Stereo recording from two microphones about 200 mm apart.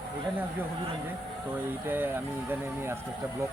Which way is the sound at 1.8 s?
10° right (ahead or behind).